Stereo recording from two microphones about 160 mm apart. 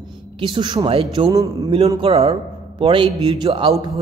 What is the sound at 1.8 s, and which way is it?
Speech, 35° right (ahead or behind).